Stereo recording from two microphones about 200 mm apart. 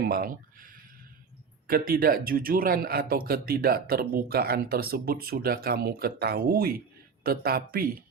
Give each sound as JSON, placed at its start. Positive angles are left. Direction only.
{"t": 0.0, "sound": "a man's voice", "side_deg": -50}